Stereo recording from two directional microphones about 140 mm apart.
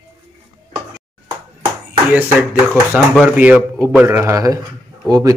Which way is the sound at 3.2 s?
10° right (ahead or behind).